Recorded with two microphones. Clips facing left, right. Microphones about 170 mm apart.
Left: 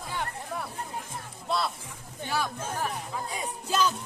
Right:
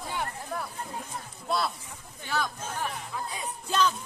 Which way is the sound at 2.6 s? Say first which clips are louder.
Left 2 dB; 45° left (ahead or behind).